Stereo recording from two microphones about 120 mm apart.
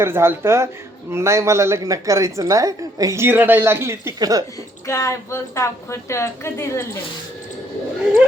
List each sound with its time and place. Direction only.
0.0 s a woman's voice: 20° right (ahead or behind)
4.9 s a woman's voice: 25° left (ahead or behind)